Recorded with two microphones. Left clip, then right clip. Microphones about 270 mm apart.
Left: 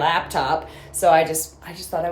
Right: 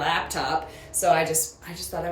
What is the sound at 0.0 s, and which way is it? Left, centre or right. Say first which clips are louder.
A woman's voice: left 5 dB; centre.